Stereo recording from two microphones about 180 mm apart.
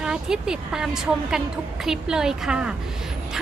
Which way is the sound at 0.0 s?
5° right (ahead or behind).